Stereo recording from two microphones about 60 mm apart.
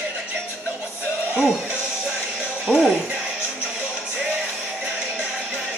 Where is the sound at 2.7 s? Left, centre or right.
Centre.